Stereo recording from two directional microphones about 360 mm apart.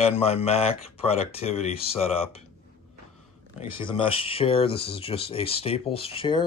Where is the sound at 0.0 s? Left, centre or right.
Centre.